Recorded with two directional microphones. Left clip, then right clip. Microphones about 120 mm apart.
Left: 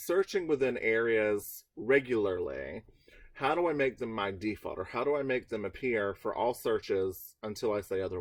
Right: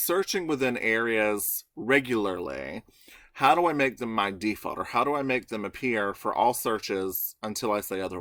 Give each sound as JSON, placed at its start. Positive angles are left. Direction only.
{"t": 0.1, "sound": "speech", "side_deg": -25}